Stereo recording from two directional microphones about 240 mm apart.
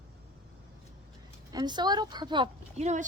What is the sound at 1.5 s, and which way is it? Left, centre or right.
A woman's voice, centre.